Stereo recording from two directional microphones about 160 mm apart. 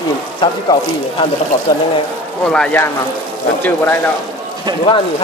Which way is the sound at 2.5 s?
5° left (ahead or behind).